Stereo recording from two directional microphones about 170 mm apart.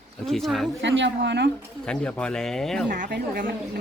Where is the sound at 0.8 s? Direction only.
90° right.